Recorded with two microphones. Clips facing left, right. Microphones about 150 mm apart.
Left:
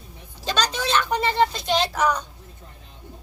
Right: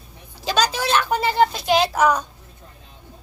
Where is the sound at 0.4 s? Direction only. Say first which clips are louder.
Right 4 dB; 10° right (ahead or behind).